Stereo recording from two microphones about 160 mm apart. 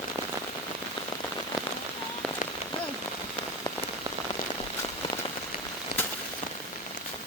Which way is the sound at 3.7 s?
25° left (ahead or behind).